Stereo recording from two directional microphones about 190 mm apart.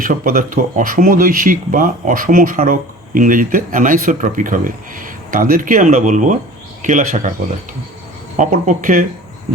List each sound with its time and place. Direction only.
0.0 s speech: 45° right (ahead or behind)
8.4 s speech: 45° right (ahead or behind)